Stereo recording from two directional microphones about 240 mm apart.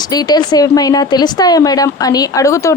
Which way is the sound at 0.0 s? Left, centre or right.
Centre.